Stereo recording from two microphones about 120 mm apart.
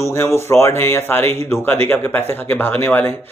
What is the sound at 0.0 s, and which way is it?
Speech, 25° left (ahead or behind).